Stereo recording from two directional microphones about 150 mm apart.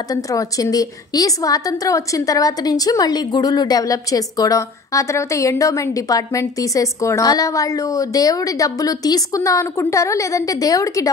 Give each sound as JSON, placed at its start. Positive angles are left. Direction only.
{"t": 0.1, "sound": "a woman's voice", "side_deg": 25}